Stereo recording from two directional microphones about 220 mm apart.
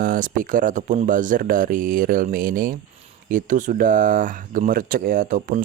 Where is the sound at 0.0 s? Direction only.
40° right (ahead or behind).